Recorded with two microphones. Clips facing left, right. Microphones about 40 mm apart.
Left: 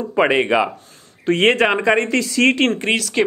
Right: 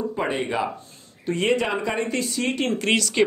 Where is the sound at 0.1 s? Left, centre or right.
Left.